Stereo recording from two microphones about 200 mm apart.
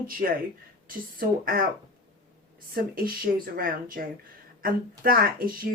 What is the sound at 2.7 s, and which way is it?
Speech, 45° right (ahead or behind).